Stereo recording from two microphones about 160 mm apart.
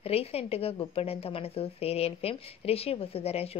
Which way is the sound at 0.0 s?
40° left (ahead or behind).